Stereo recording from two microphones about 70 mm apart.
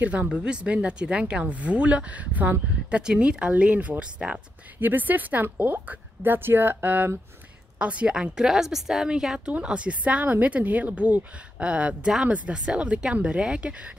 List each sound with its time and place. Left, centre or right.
0.0 s a woman's voice: centre
3.0 s a woman's voice: centre
4.7 s speech: right
7.8 s a woman's voice: centre